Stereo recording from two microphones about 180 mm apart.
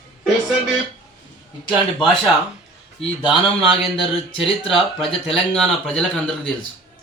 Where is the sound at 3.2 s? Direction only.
5° right (ahead or behind).